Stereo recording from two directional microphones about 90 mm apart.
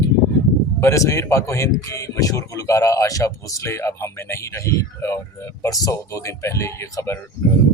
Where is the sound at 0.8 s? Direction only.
35° left (ahead or behind).